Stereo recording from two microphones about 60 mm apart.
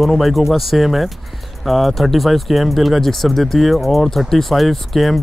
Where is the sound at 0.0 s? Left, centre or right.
Centre.